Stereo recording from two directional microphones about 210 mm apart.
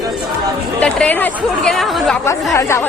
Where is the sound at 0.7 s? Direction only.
5° left (ahead or behind).